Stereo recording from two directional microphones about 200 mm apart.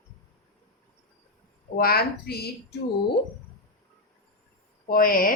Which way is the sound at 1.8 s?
50° left (ahead or behind).